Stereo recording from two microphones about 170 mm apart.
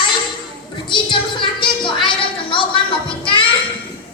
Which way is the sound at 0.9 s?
30° left (ahead or behind).